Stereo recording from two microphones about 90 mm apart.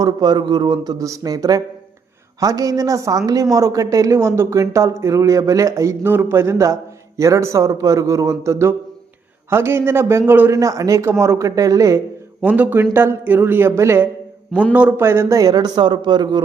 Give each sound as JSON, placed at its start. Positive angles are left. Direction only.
{"t": 0.0, "sound": "a man's voice", "side_deg": -55}
{"t": 10.5, "sound": "speech", "side_deg": -40}
{"t": 12.4, "sound": "a man's voice", "side_deg": -20}
{"t": 14.7, "sound": "a man's voice", "side_deg": -15}
{"t": 14.9, "sound": "speech", "side_deg": -30}